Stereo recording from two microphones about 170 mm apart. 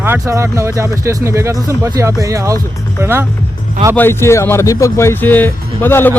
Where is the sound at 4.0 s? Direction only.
15° left (ahead or behind).